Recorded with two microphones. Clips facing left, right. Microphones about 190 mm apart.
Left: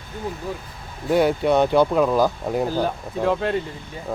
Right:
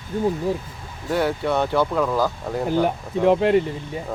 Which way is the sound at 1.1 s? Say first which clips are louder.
Left 4 dB; 15° left (ahead or behind).